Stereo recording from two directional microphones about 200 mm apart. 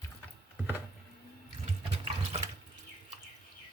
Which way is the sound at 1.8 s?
30° right (ahead or behind).